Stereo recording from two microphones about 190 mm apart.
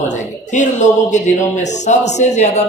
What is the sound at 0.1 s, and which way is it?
Speech, 40° left (ahead or behind).